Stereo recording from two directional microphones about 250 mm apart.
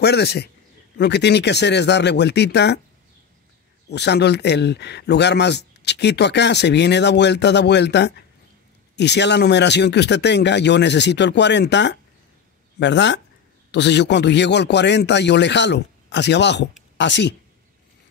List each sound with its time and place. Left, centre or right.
0.0 s a man's voice: left
3.9 s speech: left